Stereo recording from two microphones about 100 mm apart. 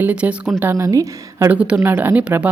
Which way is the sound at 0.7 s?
30° right (ahead or behind).